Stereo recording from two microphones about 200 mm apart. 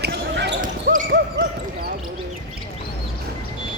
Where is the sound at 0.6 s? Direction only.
40° right (ahead or behind).